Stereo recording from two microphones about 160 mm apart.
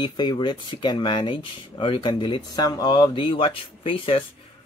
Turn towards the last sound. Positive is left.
turn(degrees=35)  # may be behind; listen again after turning